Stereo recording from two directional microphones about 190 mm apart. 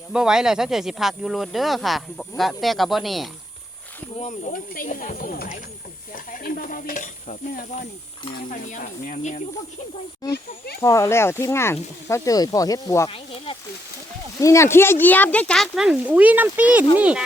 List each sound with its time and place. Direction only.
0.1 s speech: 5° right (ahead or behind)
4.2 s speech: 40° left (ahead or behind)
10.8 s speech: 15° left (ahead or behind)
13.1 s speech: 30° left (ahead or behind)
14.4 s speech: 15° left (ahead or behind); by 17.2 s 5° right (ahead or behind)